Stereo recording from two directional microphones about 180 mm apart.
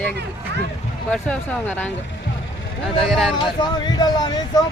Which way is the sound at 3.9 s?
25° left (ahead or behind).